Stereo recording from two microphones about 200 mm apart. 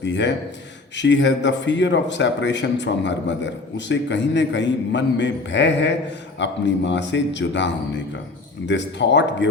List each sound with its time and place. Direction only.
0.0 s a man's voice: 60° left (ahead or behind)